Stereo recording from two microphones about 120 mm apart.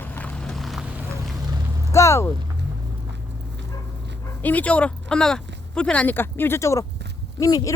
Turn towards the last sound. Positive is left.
turn(degrees=30)  # may be behind; listen again after turning